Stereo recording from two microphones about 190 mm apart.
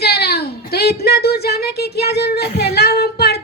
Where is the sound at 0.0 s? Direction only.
55° left (ahead or behind).